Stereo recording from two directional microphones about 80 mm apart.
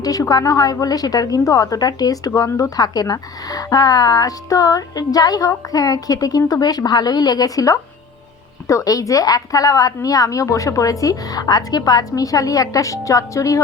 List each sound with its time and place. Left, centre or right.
0.0 s a woman's voice: left